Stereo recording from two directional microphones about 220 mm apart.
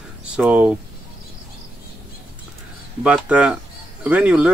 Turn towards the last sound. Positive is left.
turn(degrees=-5)  # may be behind; listen again after turning